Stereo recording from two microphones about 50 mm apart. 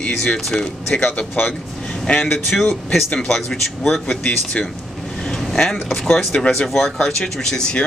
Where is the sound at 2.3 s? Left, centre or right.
Centre.